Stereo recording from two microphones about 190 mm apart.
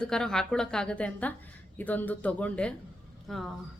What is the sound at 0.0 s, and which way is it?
A woman's voice, 5° left (ahead or behind).